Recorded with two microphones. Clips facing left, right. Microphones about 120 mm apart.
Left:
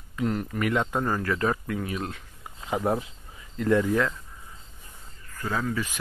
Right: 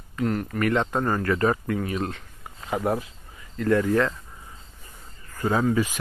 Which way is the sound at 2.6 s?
20° left (ahead or behind).